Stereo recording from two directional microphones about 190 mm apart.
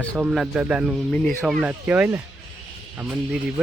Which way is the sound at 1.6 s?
10° right (ahead or behind).